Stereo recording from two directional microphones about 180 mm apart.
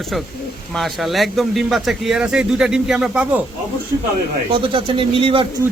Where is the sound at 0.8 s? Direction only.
Centre (ahead or behind).